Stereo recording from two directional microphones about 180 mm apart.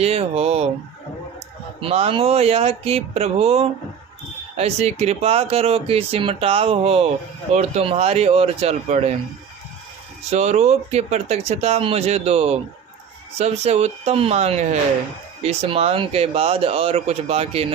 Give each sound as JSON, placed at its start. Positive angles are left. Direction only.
{"t": 0.0, "sound": "speech", "side_deg": -35}
{"t": 1.8, "sound": "speech", "side_deg": -35}
{"t": 10.3, "sound": "speech", "side_deg": -40}